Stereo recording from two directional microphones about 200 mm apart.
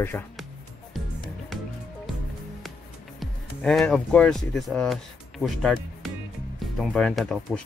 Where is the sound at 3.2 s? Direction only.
Centre (ahead or behind).